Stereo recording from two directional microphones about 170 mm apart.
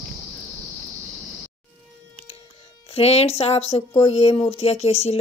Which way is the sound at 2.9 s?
35° left (ahead or behind).